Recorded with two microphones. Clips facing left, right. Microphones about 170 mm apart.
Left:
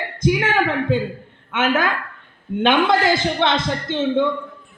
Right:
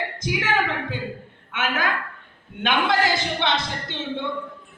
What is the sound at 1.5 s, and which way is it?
Speech, 50° left (ahead or behind).